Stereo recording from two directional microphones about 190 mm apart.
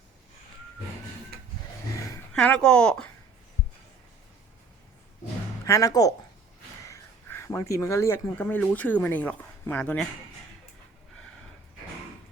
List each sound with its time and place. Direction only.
1.3 s printer: 55° right (ahead or behind)
2.3 s speech: 5° left (ahead or behind)
5.6 s speech: 15° left (ahead or behind)